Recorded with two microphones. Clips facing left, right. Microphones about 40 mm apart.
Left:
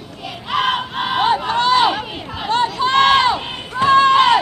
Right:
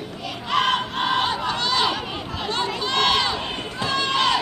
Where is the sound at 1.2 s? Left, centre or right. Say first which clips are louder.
Left 8 dB; left.